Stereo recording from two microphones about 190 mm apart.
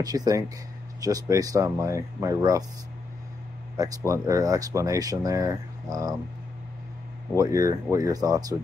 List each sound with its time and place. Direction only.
0.0 s speech: 20° right (ahead or behind)
3.7 s speech: 15° right (ahead or behind)
7.3 s speech: 15° right (ahead or behind)